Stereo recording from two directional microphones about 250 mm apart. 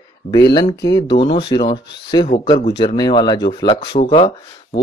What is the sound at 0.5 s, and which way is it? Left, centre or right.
Speech, centre.